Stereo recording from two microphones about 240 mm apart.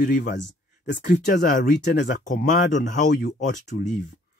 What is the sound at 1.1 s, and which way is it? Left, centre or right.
Speech, left.